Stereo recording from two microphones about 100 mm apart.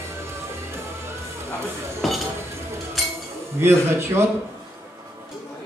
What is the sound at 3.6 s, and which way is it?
Speech, 25° right (ahead or behind).